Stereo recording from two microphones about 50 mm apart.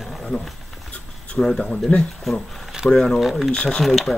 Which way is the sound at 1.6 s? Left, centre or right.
Left.